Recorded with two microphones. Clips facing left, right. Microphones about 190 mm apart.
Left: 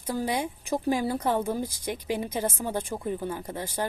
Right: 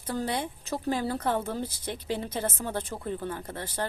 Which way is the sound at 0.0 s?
10° left (ahead or behind).